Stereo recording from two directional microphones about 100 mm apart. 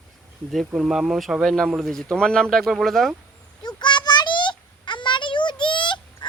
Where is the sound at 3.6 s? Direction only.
50° left (ahead or behind).